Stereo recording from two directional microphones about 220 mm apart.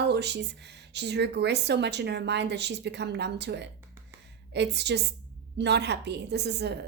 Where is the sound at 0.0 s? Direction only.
50° right (ahead or behind).